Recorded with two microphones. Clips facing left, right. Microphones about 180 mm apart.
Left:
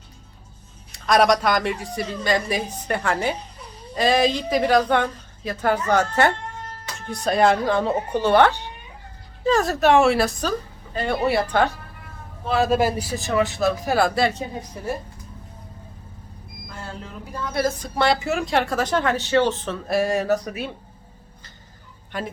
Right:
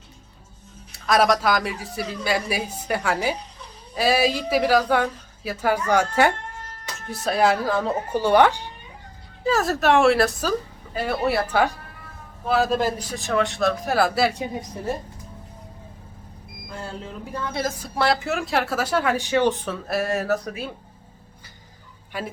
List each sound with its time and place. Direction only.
0.9 s a woman's voice: centre (ahead or behind)
9.5 s a woman's voice: centre (ahead or behind)
17.5 s a woman's voice: 20° right (ahead or behind)
17.7 s a woman's voice: 5° right (ahead or behind)
22.1 s a woman's voice: 10° right (ahead or behind)